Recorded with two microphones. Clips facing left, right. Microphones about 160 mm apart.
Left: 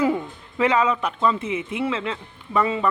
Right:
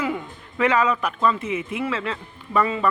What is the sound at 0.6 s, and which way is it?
A man's voice, 20° left (ahead or behind).